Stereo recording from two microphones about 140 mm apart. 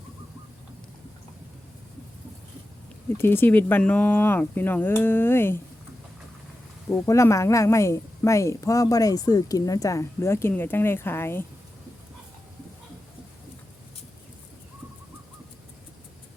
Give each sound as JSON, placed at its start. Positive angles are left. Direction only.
{"t": 3.2, "sound": "speech", "side_deg": 15}
{"t": 6.9, "sound": "a woman's voice", "side_deg": 20}